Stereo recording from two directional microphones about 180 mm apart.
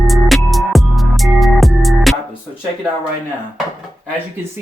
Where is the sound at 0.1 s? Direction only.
Centre (ahead or behind).